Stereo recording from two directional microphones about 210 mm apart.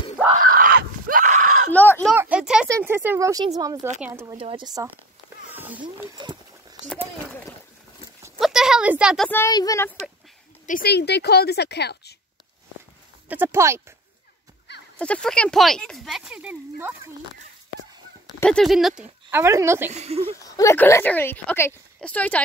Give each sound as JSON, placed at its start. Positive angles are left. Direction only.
{"t": 0.4, "sound": "a sound", "side_deg": -40}
{"t": 1.7, "sound": "a sound", "side_deg": 10}
{"t": 2.1, "sound": "a sound", "side_deg": -5}
{"t": 3.5, "sound": "speech", "side_deg": -15}
{"t": 4.4, "sound": "speech", "side_deg": -25}
{"t": 5.5, "sound": "speech", "side_deg": -10}
{"t": 8.4, "sound": "a sound", "side_deg": 0}
{"t": 9.3, "sound": "a woman's voice", "side_deg": 15}
{"t": 10.7, "sound": "a woman's voice", "side_deg": 50}
{"t": 13.3, "sound": "speech", "side_deg": -10}
{"t": 15.0, "sound": "speech", "side_deg": 5}
{"t": 18.4, "sound": "speech", "side_deg": 5}
{"t": 19.9, "sound": "speech", "side_deg": -30}
{"t": 20.4, "sound": "a woman's voice", "side_deg": 15}